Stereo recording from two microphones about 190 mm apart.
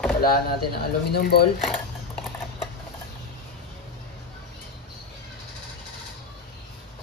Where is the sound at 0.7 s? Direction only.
55° left (ahead or behind).